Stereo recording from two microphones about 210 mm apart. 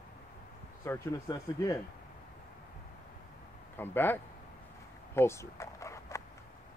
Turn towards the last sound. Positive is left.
turn(degrees=15)  # may be behind; listen again after turning